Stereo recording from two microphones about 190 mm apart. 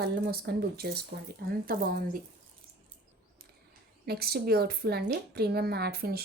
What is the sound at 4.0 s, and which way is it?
Speech, 55° right (ahead or behind).